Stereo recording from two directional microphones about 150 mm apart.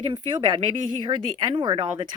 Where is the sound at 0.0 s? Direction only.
35° right (ahead or behind).